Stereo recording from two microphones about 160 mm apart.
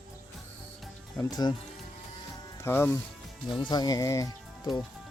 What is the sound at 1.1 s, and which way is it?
Speech, 25° left (ahead or behind).